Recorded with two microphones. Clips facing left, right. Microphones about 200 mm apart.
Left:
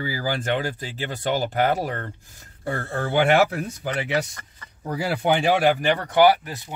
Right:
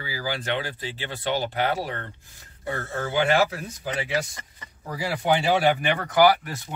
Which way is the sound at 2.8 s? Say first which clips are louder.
Left 3 dB; 60° left (ahead or behind).